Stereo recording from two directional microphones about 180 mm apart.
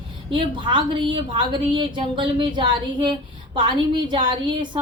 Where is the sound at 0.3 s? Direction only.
25° right (ahead or behind).